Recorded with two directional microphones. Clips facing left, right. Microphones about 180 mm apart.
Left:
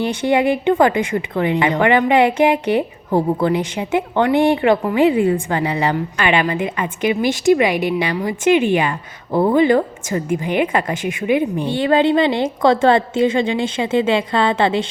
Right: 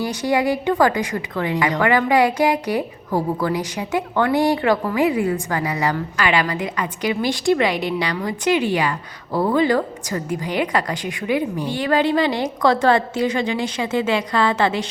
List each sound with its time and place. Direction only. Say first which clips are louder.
0.0 s a woman's voice: left 3 dB; 25° left (ahead or behind)